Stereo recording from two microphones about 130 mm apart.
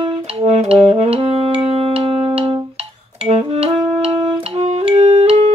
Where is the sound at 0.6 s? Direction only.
50° right (ahead or behind).